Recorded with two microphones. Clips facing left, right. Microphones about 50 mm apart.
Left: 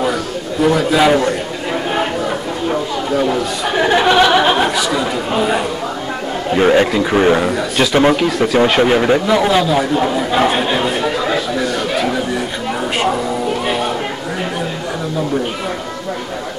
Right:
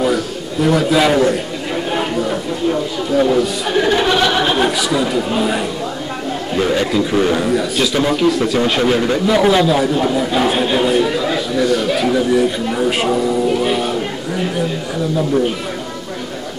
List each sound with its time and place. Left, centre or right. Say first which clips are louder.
0.0 s a man's voice: right 1 dB; centre
3.7 s speech: left 3 dB; centre
6.5 s speech: left 4 dB; left
7.5 s speech: even; centre
7.9 s speech: left 5 dB; left
8.3 s a man's voice: right 1 dB; centre
8.8 s speech: left 3 dB; left
9.2 s a man's voice: right 1 dB; centre